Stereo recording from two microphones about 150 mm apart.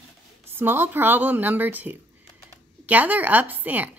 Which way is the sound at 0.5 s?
15° right (ahead or behind).